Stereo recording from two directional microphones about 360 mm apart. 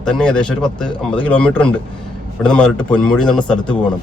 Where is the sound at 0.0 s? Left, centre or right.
Centre.